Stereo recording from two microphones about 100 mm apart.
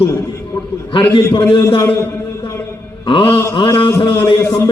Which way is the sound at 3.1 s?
60° left (ahead or behind).